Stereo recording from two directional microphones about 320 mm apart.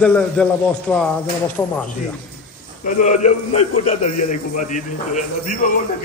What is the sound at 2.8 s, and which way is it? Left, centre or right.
A man's voice, left.